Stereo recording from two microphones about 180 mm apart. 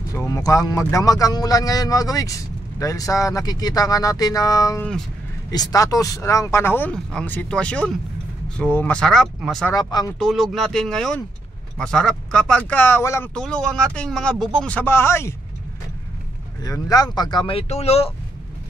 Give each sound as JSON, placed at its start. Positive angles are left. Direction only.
{"t": 0.3, "sound": "speech", "side_deg": 20}
{"t": 9.7, "sound": "speech", "side_deg": 20}
{"t": 10.1, "sound": "speech", "side_deg": 0}
{"t": 16.6, "sound": "speech", "side_deg": 20}